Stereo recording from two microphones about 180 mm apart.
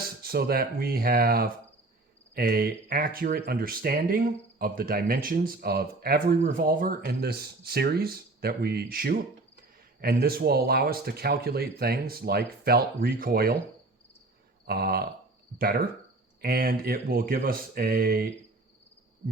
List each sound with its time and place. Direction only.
0.2 s speech: 60° right (ahead or behind)
14.6 s speech: 60° right (ahead or behind)